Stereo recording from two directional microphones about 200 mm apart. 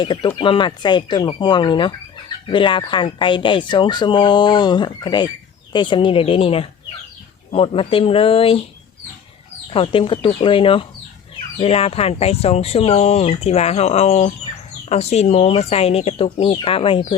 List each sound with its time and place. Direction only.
0.0 s speech: 25° left (ahead or behind)
9.7 s speech: 25° left (ahead or behind)